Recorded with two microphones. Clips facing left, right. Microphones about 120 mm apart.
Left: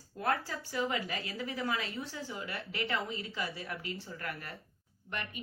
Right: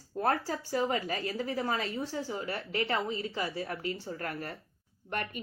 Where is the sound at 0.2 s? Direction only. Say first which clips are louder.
Right 4 dB; 40° right (ahead or behind).